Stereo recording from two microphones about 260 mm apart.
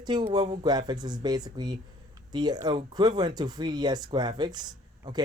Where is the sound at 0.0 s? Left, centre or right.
Centre.